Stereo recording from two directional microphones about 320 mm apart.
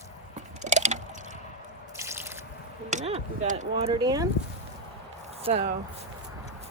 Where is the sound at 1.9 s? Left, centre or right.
Centre.